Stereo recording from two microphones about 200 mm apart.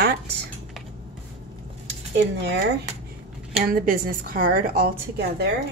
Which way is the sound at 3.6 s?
45° right (ahead or behind).